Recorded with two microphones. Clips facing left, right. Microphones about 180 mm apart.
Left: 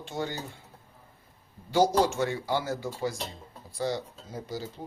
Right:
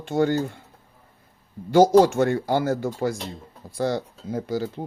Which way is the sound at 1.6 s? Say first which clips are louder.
Right 8 dB; 50° right (ahead or behind).